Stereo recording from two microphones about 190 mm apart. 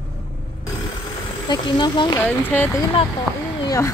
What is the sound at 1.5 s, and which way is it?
Speech, 25° left (ahead or behind).